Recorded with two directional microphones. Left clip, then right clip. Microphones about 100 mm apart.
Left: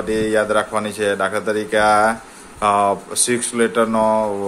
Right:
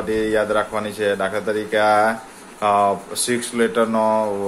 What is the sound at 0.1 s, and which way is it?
Speech, 35° left (ahead or behind).